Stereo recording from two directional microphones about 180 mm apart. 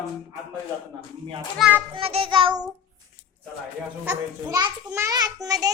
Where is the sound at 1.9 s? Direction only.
30° right (ahead or behind).